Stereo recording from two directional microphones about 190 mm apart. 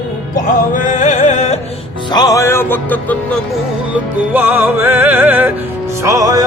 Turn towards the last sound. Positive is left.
turn(degrees=-20)  # may be behind; listen again after turning